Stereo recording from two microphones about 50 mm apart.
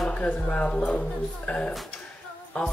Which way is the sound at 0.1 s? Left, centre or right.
Left.